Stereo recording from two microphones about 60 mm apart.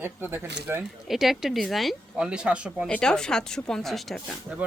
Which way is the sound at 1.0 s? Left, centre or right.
Centre.